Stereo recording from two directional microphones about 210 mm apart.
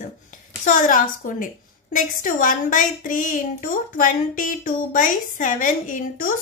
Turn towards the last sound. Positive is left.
turn(degrees=40)  # may be behind; listen again after turning